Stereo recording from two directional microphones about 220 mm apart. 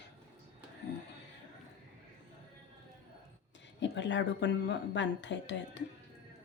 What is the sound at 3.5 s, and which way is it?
Speech, 55° left (ahead or behind).